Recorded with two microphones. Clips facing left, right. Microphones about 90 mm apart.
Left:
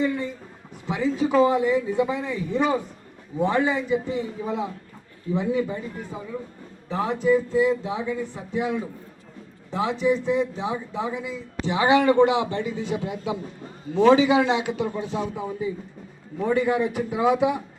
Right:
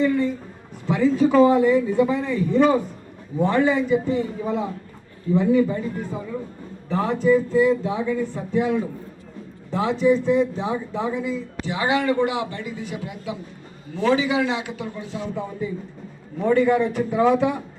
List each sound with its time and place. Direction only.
0.0 s a sound: 15° left (ahead or behind)
0.9 s speech: 15° left (ahead or behind)
9.7 s speech: 15° left (ahead or behind)
15.4 s speech: 10° left (ahead or behind)